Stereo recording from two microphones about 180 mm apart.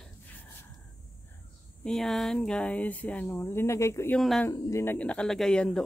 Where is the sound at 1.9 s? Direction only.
Centre (ahead or behind).